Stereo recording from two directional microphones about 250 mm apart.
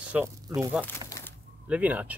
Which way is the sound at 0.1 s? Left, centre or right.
Centre.